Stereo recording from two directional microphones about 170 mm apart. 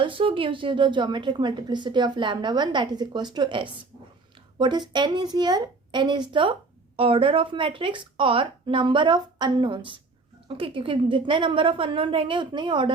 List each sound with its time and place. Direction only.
0.0 s a woman's voice: 30° right (ahead or behind)